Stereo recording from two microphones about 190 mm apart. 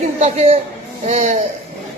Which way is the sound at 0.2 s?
35° right (ahead or behind).